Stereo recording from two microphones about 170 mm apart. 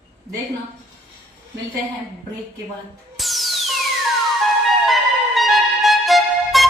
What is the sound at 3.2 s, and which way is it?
Music, centre (ahead or behind).